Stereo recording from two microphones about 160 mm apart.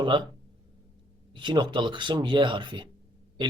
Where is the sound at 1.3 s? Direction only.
30° right (ahead or behind).